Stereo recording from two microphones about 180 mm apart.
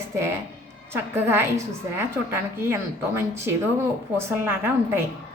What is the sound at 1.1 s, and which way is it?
A woman's voice, 15° right (ahead or behind).